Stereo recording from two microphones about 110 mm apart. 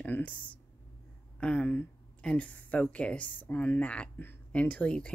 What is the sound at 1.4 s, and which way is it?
Speech, 10° left (ahead or behind).